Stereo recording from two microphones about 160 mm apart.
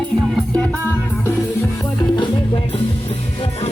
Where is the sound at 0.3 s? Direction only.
10° left (ahead or behind).